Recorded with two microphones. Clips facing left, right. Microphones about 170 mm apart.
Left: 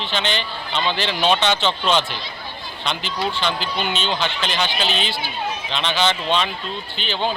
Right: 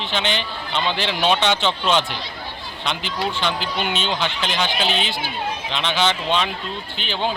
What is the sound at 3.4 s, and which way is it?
Speech, 10° right (ahead or behind).